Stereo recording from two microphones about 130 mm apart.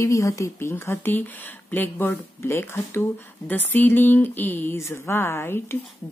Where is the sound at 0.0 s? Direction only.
25° left (ahead or behind).